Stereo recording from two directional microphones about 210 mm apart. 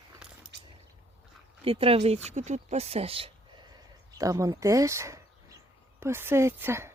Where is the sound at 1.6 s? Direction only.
25° right (ahead or behind).